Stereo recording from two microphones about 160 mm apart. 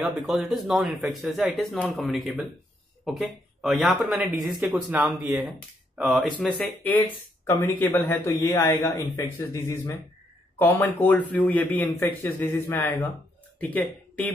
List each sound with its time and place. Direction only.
0.0 s speech: centre (ahead or behind)
6.3 s a man's voice: 10° left (ahead or behind)